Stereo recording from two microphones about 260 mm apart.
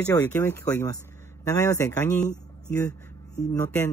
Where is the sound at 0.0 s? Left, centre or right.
Centre.